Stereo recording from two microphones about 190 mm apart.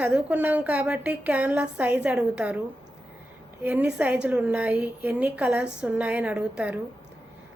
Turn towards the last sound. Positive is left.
turn(degrees=-5)  # may be behind; listen again after turning